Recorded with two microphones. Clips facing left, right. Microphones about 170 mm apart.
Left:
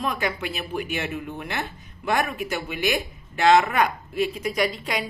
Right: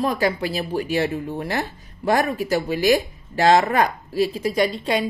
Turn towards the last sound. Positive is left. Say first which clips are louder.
# right 5 dB
turn(degrees=-30)  # may be behind; listen again after turning